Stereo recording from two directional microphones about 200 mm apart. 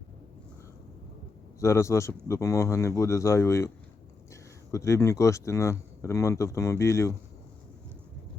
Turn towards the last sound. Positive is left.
turn(degrees=15)  # may be behind; listen again after turning